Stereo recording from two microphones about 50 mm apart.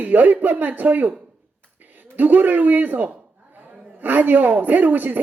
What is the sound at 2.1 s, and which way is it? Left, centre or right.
A woman's voice, right.